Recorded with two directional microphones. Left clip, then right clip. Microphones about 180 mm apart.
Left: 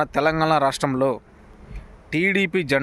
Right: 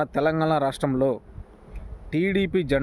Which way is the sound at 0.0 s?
5° right (ahead or behind).